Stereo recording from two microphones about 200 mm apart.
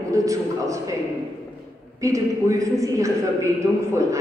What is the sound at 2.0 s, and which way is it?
A man's voice, 15° right (ahead or behind).